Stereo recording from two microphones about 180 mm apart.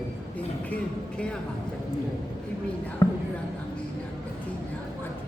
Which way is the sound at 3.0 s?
20° left (ahead or behind).